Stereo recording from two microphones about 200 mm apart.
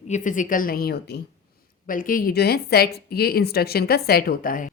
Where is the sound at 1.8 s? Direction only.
45° left (ahead or behind).